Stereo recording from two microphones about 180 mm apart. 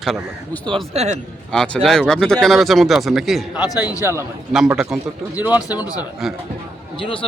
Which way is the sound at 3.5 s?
20° left (ahead or behind).